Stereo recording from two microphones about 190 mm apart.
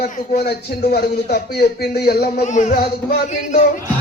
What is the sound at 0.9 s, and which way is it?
A man's voice, 55° left (ahead or behind).